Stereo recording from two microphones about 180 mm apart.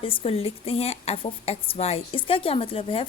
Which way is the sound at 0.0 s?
30° left (ahead or behind).